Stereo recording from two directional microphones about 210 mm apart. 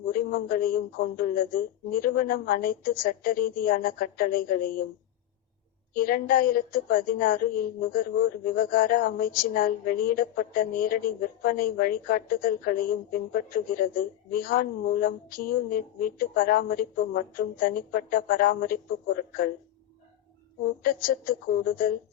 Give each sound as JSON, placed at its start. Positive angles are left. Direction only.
{"t": 0.3, "sound": "a woman's voice", "side_deg": 40}
{"t": 5.9, "sound": "a woman's voice", "side_deg": 45}
{"t": 20.8, "sound": "a woman's voice", "side_deg": 40}